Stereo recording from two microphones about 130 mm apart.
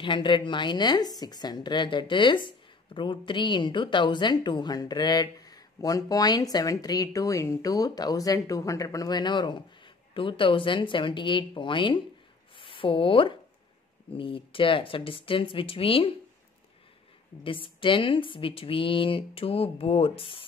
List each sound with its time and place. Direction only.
0.0 s a woman's voice: 40° left (ahead or behind)
17.4 s a woman's voice: 40° left (ahead or behind)